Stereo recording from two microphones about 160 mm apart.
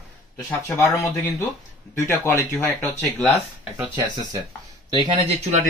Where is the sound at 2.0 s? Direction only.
15° left (ahead or behind).